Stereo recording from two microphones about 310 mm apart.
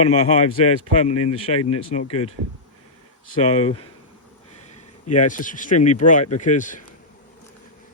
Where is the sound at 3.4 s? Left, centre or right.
Centre.